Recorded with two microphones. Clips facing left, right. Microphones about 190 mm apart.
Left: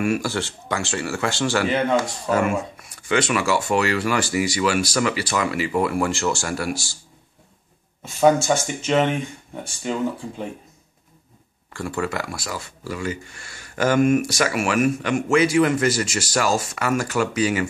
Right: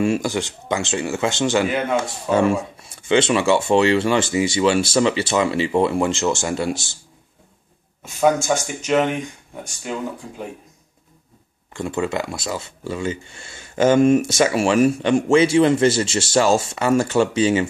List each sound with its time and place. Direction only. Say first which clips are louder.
0.0 s speech: right 3 dB; 20° right (ahead or behind)
8.5 s speech: right 1 dB; centre (ahead or behind)
11.7 s speech: right 3 dB; 20° right (ahead or behind)